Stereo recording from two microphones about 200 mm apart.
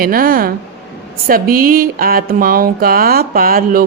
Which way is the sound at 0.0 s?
45° right (ahead or behind).